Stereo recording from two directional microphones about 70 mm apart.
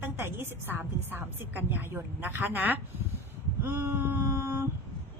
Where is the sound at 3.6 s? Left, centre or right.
Right.